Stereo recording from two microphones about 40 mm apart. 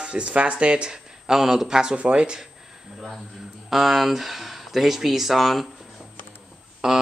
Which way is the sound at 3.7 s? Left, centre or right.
Centre.